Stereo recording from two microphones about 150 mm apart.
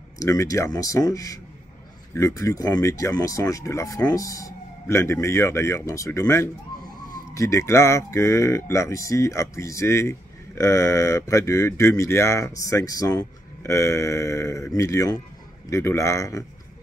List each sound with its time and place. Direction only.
0.2 s speech: 20° left (ahead or behind)